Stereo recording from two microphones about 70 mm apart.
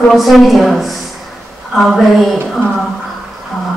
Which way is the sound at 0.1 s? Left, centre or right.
Centre.